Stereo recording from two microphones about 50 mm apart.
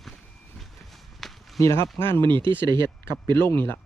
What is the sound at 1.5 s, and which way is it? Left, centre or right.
Speech, left.